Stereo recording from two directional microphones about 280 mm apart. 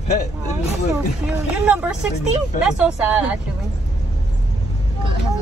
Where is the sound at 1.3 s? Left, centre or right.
Centre.